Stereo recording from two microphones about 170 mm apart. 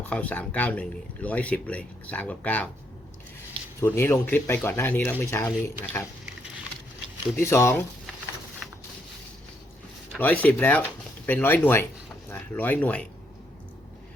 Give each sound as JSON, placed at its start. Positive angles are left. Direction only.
{"t": 0.1, "sound": "speech", "side_deg": 10}
{"t": 3.8, "sound": "speech", "side_deg": 15}
{"t": 7.3, "sound": "speech", "side_deg": 15}
{"t": 10.2, "sound": "speech", "side_deg": 10}